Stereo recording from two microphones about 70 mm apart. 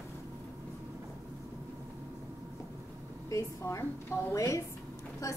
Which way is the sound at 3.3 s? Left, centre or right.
Left.